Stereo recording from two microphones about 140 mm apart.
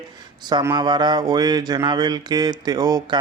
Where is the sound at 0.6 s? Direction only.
30° right (ahead or behind).